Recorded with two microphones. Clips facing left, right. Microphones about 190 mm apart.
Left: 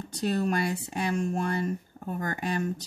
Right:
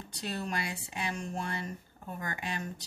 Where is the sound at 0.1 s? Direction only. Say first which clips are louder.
Left 9 dB; 45° left (ahead or behind).